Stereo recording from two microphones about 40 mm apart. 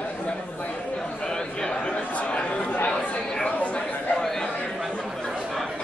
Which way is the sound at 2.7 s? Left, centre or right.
Left.